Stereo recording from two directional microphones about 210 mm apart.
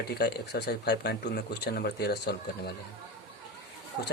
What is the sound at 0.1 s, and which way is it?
Speech, 50° left (ahead or behind).